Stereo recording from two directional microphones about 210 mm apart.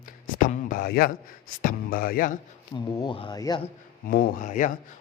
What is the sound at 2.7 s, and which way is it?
Speech, 20° left (ahead or behind).